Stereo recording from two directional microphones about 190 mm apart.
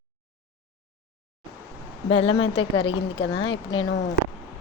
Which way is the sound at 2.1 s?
30° left (ahead or behind).